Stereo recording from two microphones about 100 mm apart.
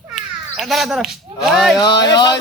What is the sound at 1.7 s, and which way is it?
Speech, 45° left (ahead or behind).